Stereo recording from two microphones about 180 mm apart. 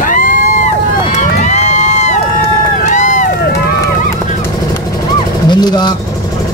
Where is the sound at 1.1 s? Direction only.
40° left (ahead or behind).